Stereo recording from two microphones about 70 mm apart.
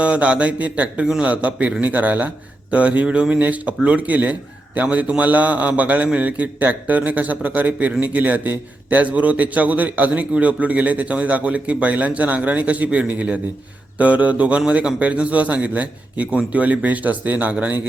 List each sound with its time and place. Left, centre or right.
0.0 s speech: centre